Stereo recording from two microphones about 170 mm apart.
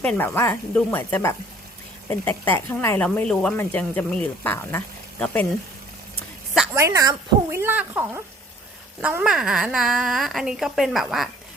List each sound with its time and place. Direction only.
0.0 s speech: 10° left (ahead or behind)
6.7 s a woman's voice: 20° right (ahead or behind); by 11.3 s centre (ahead or behind)